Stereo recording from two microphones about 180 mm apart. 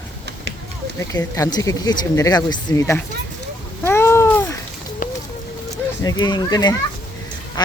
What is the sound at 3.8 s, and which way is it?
Cat, 15° left (ahead or behind).